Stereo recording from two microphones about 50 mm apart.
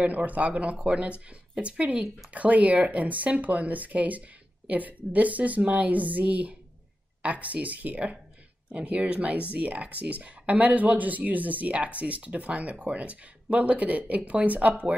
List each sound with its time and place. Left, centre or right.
0.0 s speech: right